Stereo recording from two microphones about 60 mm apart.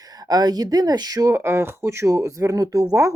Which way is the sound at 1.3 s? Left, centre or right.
Right.